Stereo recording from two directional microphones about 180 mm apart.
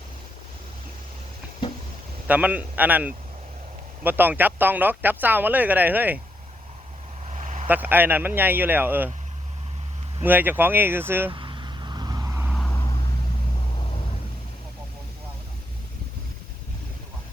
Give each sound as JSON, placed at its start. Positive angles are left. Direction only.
{"t": 2.2, "sound": "speech", "side_deg": -10}
{"t": 7.3, "sound": "vehicle", "side_deg": -40}
{"t": 7.7, "sound": "speech", "side_deg": -10}
{"t": 10.2, "sound": "speech", "side_deg": -10}
{"t": 11.3, "sound": "vehicle", "side_deg": -25}
{"t": 12.5, "sound": "vehicle", "side_deg": 0}